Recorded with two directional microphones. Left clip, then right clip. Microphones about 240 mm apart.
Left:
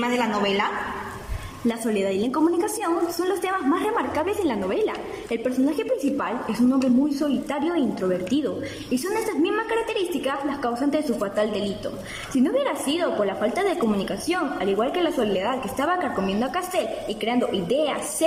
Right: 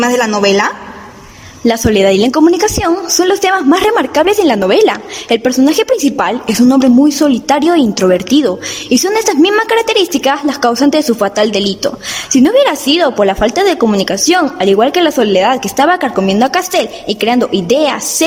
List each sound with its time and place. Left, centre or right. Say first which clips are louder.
0.0 s a woman's voice: right 12 dB; right